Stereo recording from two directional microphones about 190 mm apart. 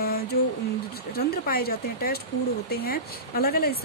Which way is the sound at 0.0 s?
55° left (ahead or behind).